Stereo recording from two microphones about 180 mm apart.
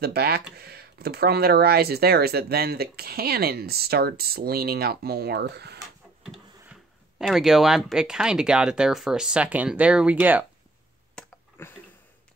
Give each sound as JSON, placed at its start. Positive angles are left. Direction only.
{"t": 0.0, "sound": "speech", "side_deg": -60}
{"t": 6.2, "sound": "speech", "side_deg": 0}
{"t": 11.1, "sound": "a sound", "side_deg": 10}